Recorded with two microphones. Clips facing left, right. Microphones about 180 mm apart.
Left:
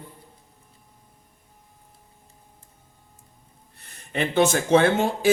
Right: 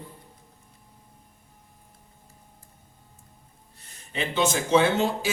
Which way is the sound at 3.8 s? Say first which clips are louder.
Left 5 dB; 55° left (ahead or behind).